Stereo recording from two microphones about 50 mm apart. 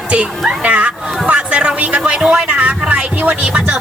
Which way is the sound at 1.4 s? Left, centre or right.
Right.